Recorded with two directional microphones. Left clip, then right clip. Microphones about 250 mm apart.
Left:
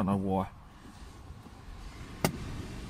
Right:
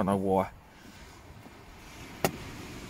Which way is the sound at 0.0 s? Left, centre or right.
Centre.